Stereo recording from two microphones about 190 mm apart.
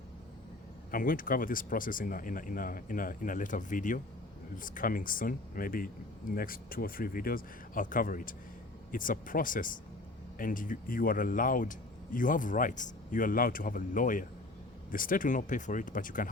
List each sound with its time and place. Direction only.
0.9 s speech: 45° left (ahead or behind)